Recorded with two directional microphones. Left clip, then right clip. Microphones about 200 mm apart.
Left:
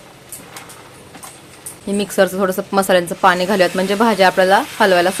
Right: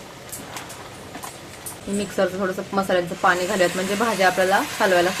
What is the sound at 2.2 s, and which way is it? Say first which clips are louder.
Speech: left 7 dB; 60° left (ahead or behind).